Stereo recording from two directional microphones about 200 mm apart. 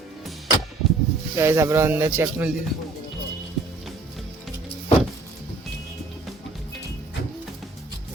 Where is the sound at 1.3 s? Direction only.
15° right (ahead or behind).